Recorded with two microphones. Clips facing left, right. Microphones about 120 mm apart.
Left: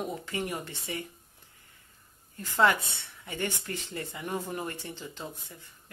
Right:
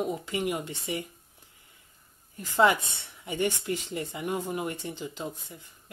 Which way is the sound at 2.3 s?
20° right (ahead or behind).